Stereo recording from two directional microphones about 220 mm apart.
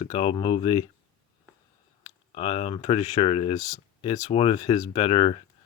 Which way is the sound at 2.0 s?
25° left (ahead or behind).